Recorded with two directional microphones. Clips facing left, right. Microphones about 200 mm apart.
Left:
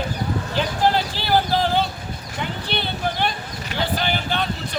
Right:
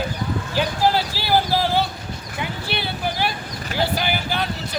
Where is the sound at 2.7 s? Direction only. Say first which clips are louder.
Left 1 dB; 5° right (ahead or behind).